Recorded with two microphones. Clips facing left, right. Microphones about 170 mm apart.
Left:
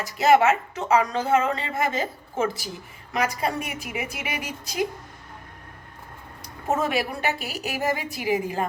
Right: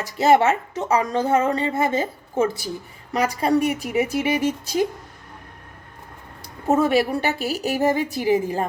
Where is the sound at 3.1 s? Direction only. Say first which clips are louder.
Right 6 dB; 35° right (ahead or behind).